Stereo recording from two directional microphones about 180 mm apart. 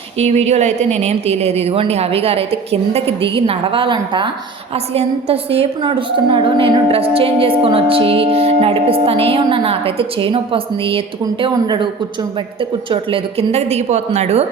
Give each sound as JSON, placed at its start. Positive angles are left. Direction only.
{"t": 0.2, "sound": "a woman's voice", "side_deg": -35}
{"t": 12.9, "sound": "a woman's voice", "side_deg": -30}